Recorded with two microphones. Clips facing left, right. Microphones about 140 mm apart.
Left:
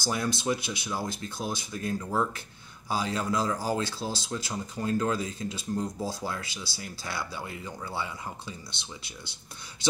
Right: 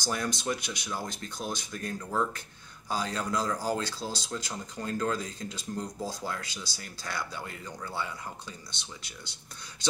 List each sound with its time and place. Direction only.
0.0 s speech: 5° left (ahead or behind)